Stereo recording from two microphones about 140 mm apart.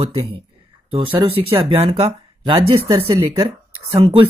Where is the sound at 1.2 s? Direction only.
40° right (ahead or behind).